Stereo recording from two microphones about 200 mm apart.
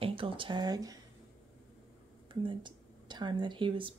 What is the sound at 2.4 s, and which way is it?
Speech, 25° right (ahead or behind).